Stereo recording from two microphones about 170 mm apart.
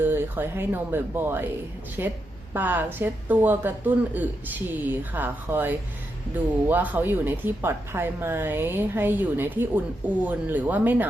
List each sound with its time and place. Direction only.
0.0 s speech: 10° right (ahead or behind)